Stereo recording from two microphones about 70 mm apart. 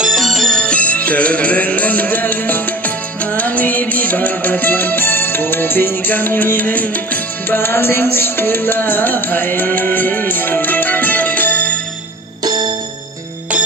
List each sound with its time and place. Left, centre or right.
0.0 s music: centre
0.6 s music: centre
12.4 s music: right